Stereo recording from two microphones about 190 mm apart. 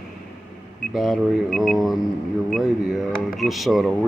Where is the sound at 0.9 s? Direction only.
Centre (ahead or behind).